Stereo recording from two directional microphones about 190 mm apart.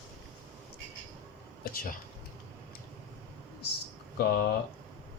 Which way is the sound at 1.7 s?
50° left (ahead or behind).